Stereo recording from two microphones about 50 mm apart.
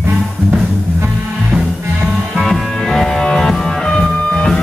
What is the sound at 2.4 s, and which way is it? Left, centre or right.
Music, centre.